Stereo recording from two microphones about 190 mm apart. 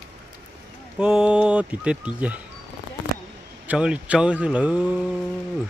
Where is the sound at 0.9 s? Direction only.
5° right (ahead or behind).